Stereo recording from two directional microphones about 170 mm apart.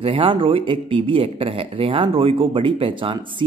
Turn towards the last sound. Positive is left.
turn(degrees=-30)  # may be behind; listen again after turning